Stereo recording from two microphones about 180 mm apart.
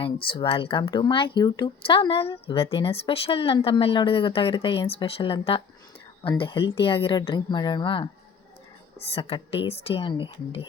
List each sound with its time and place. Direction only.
0.0 s a woman's voice: 30° left (ahead or behind)